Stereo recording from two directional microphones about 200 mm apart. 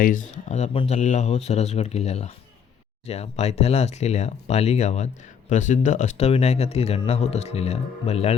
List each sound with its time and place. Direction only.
0.0 s speech: 40° left (ahead or behind)